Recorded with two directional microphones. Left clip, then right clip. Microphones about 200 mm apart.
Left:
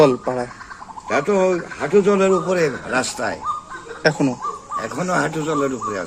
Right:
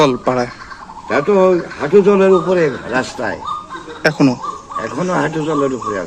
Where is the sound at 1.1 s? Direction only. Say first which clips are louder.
Right 5 dB; 15° left (ahead or behind).